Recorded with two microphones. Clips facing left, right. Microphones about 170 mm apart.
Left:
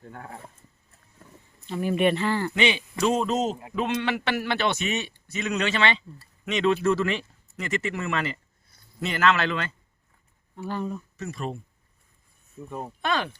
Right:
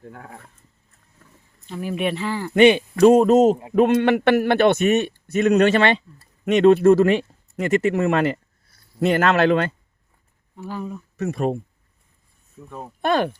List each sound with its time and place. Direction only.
1.6 s speech: 5° right (ahead or behind)
2.6 s speech: 50° right (ahead or behind)
10.7 s speech: 5° right (ahead or behind)
11.2 s speech: 55° right (ahead or behind)
12.5 s speech: 5° left (ahead or behind)
13.0 s speech: 50° right (ahead or behind)